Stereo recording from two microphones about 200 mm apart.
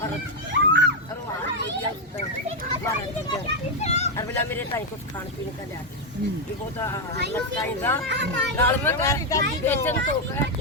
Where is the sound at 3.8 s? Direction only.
35° left (ahead or behind).